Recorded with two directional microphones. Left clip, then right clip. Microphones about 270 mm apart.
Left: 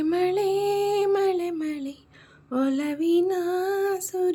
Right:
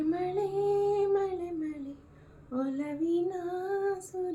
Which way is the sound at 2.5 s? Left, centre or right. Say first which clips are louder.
Left 8 dB; left.